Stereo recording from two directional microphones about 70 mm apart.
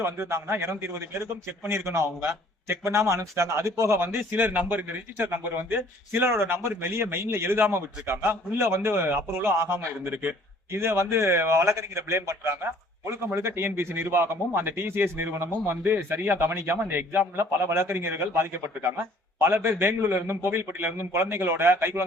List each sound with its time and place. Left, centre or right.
0.0 s a man's voice: right
4.2 s a man's voice: right